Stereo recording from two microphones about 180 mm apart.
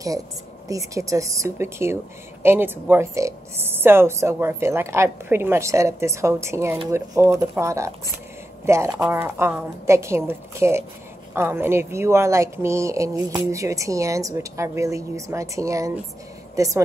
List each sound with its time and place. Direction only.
0.7 s a woman's voice: 15° right (ahead or behind)